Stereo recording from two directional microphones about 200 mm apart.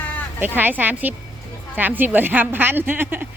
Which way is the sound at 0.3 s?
10° right (ahead or behind).